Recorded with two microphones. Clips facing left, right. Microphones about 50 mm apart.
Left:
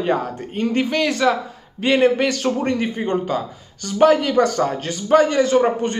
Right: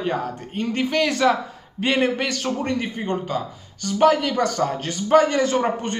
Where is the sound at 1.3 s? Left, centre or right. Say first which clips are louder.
Left 2 dB; centre.